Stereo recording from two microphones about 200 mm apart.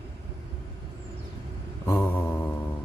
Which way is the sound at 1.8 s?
10° left (ahead or behind).